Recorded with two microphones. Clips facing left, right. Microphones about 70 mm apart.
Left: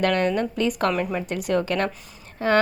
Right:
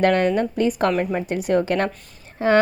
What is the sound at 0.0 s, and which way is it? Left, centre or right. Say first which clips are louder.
Speech: right 4 dB; right.